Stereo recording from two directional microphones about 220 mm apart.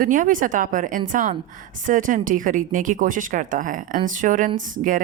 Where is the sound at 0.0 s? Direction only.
35° right (ahead or behind).